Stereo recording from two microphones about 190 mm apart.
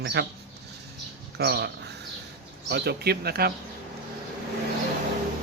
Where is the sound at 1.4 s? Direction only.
60° right (ahead or behind).